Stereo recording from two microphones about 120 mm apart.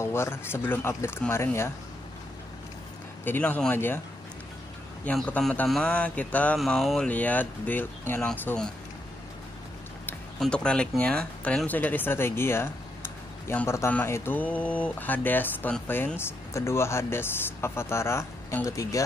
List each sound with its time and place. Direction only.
0.0 s speech: 20° left (ahead or behind)
3.3 s speech: 15° left (ahead or behind)
5.0 s speech: 10° left (ahead or behind)
6.6 s a sound: centre (ahead or behind)
7.1 s speech: 15° left (ahead or behind)
10.4 s speech: 10° left (ahead or behind); by 19.0 s 25° left (ahead or behind)